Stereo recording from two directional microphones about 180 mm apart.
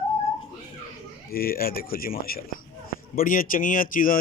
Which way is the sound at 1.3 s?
55° left (ahead or behind).